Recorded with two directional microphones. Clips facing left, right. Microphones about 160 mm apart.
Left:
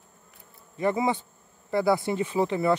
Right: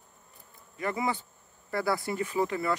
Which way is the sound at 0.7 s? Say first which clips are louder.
Left 6 dB; 25° left (ahead or behind).